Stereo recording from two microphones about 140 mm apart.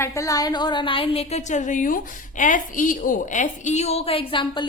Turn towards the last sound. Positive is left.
turn(degrees=35)  # may be behind; listen again after turning